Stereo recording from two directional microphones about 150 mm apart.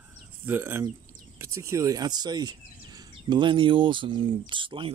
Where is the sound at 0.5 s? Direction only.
15° right (ahead or behind).